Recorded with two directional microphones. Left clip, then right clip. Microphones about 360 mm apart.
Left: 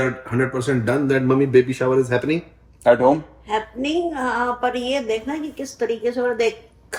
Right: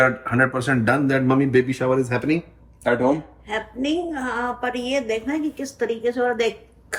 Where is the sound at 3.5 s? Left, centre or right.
Centre.